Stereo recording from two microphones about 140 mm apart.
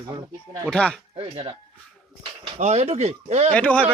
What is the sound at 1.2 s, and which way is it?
Speech, 35° right (ahead or behind).